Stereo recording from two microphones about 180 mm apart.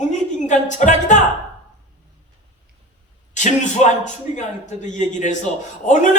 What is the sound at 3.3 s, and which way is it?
A man's voice, 40° left (ahead or behind).